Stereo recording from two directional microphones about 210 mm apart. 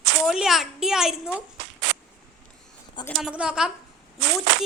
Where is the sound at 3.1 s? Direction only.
Centre (ahead or behind).